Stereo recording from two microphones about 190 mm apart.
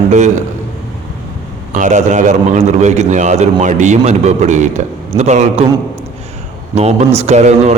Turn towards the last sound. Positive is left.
turn(degrees=-35)  # may be behind; listen again after turning